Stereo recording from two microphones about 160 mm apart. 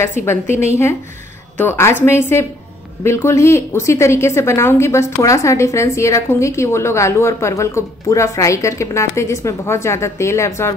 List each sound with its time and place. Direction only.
0.2 s a woman's voice: 15° left (ahead or behind)